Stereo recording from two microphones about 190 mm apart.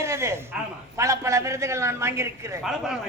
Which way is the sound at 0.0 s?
15° right (ahead or behind).